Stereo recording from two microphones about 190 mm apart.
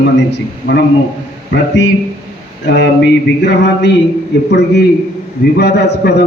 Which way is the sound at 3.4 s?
65° left (ahead or behind).